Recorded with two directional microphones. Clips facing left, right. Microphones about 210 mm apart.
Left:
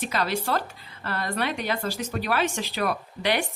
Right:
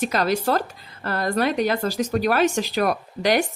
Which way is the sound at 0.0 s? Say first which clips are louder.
Right 6 dB; 40° right (ahead or behind).